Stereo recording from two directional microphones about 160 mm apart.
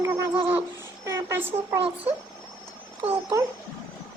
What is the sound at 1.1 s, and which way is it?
Speech, 15° right (ahead or behind).